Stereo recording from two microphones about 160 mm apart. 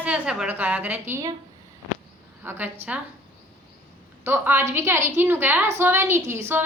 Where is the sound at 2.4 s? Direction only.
10° right (ahead or behind).